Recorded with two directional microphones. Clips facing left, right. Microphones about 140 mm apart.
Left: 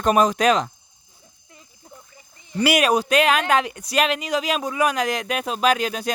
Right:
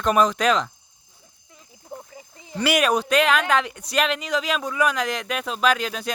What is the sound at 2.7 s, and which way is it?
Speech, 10° left (ahead or behind).